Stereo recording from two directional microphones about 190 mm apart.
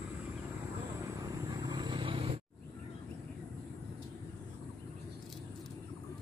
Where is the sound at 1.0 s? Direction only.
20° right (ahead or behind).